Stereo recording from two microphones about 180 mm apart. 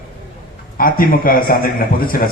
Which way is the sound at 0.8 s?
50° left (ahead or behind).